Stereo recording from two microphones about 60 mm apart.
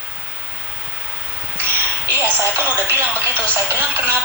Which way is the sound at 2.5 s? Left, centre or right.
Right.